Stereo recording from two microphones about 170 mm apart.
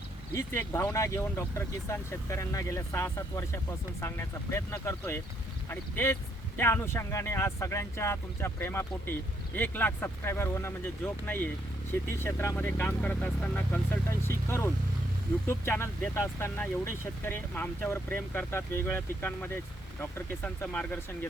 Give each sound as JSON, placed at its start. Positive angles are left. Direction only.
{"t": 0.3, "sound": "speech", "side_deg": 15}